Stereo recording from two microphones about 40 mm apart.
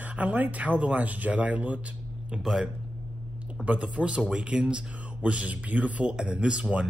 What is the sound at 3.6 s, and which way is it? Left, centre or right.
Speech, right.